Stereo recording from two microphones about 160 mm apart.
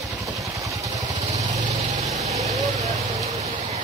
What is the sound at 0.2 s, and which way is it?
Vehicle, 20° right (ahead or behind).